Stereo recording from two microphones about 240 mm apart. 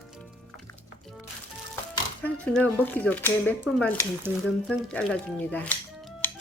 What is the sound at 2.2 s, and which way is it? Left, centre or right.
Speech, centre.